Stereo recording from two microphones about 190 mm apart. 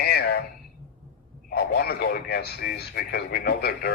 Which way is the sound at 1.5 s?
55° left (ahead or behind).